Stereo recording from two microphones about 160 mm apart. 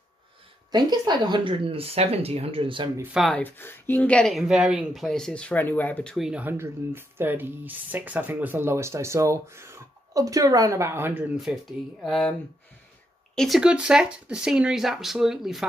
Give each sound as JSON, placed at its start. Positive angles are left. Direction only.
{"t": 0.7, "sound": "speech", "side_deg": -25}
{"t": 3.0, "sound": "speech", "side_deg": -5}
{"t": 3.3, "sound": "speech", "side_deg": 10}
{"t": 6.1, "sound": "speech", "side_deg": -5}